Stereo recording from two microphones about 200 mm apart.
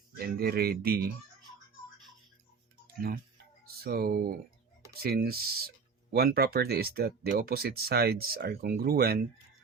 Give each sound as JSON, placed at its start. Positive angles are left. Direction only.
{"t": 0.2, "sound": "speech", "side_deg": -50}
{"t": 2.8, "sound": "tick-tock", "side_deg": -50}
{"t": 3.7, "sound": "speech", "side_deg": -50}